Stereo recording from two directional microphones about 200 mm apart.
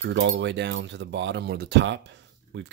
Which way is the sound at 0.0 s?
65° right (ahead or behind).